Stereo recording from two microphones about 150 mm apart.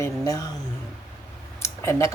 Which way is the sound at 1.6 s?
15° left (ahead or behind).